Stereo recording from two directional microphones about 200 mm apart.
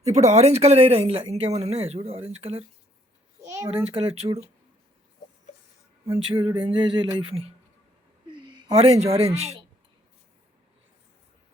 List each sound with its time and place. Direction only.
0.0 s speech: 35° right (ahead or behind)
3.4 s a sound: 15° right (ahead or behind)
3.7 s speech: 30° right (ahead or behind)
6.1 s speech: 30° right (ahead or behind)
8.4 s speech: 20° right (ahead or behind)